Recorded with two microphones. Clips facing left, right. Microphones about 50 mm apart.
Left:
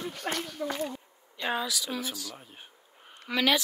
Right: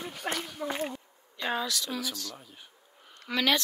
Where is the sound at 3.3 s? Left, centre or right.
Centre.